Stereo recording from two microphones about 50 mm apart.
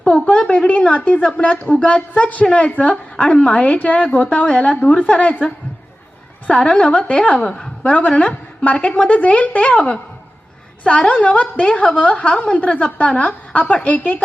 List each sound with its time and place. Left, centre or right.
0.0 s a woman's voice: left
6.5 s a woman's voice: left